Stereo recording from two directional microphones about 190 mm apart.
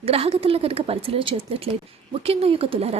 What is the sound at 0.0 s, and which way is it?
Speech, 30° right (ahead or behind).